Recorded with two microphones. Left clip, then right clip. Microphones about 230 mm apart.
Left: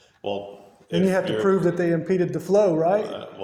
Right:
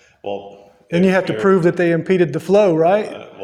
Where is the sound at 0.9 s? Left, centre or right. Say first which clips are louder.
Right 6 dB; right.